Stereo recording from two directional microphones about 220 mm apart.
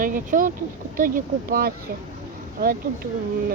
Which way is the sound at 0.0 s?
40° right (ahead or behind).